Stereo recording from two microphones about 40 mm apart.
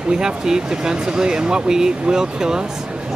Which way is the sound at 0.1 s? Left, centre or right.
Centre.